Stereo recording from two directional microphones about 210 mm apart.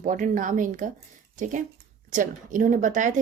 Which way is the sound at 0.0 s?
35° right (ahead or behind).